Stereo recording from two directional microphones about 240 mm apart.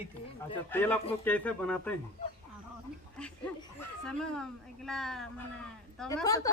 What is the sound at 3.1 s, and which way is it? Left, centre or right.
Speech, centre.